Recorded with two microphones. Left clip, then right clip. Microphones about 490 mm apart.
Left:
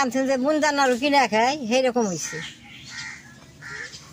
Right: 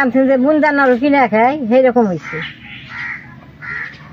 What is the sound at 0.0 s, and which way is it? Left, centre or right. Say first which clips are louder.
Speech: right 9 dB; left.